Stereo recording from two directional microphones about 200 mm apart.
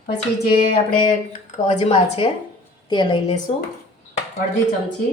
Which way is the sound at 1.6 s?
30° left (ahead or behind).